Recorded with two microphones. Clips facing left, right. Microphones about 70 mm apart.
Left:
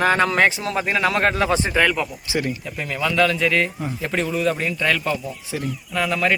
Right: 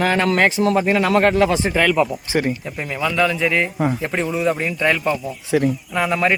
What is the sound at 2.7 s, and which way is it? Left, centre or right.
Speech, centre.